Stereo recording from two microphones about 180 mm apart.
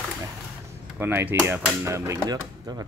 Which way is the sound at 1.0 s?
10° right (ahead or behind).